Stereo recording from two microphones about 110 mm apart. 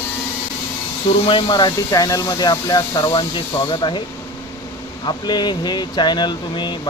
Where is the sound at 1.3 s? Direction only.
45° left (ahead or behind).